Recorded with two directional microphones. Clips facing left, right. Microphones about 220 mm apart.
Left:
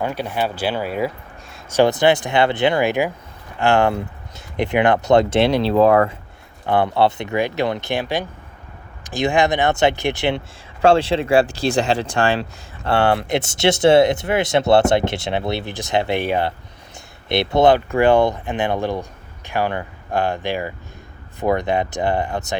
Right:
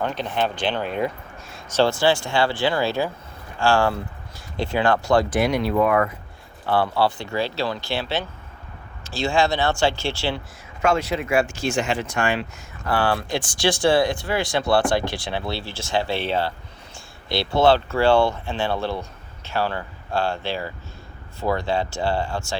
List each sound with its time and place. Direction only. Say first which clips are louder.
0.0 s speech: left 2 dB; 10° left (ahead or behind)
1.7 s speech: left 4 dB; 15° left (ahead or behind)
6.7 s speech: left 4 dB; 20° left (ahead or behind)
10.8 s speech: left 6 dB; 30° left (ahead or behind)